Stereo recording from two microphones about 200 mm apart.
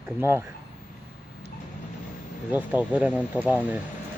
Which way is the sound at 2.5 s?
10° right (ahead or behind).